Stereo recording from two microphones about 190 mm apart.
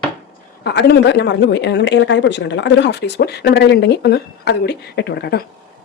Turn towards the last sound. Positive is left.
turn(degrees=60)  # may be behind; listen again after turning